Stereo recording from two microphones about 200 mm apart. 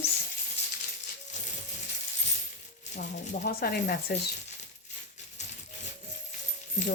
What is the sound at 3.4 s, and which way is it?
Speech, 55° left (ahead or behind).